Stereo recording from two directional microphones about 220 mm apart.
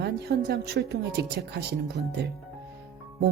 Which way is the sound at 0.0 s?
50° right (ahead or behind).